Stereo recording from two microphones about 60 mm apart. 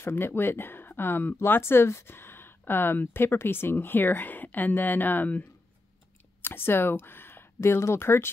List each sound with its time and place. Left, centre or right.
0.0 s speech: left